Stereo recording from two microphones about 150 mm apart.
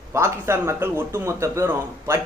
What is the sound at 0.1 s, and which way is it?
A man's voice, 15° right (ahead or behind).